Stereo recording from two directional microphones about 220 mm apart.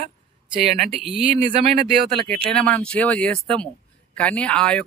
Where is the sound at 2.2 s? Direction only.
5° left (ahead or behind).